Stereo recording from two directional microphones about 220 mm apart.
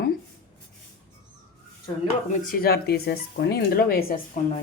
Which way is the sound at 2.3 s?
40° left (ahead or behind).